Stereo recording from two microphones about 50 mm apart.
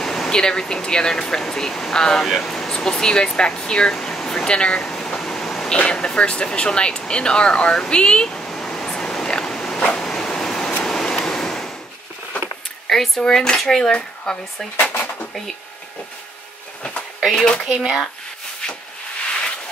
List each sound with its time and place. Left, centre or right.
0.0 s speech: centre
4.8 s a sound: centre
5.7 s speech: centre
8.9 s a sound: centre
12.8 s speech: centre
13.9 s speech: left
14.8 s drawer open or close: left
17.3 s speech: centre
17.7 s speech: centre